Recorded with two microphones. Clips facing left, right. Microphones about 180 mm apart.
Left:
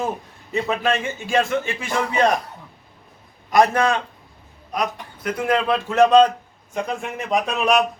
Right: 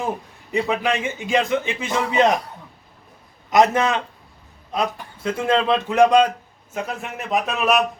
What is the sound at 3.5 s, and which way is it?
A man's voice, 20° right (ahead or behind).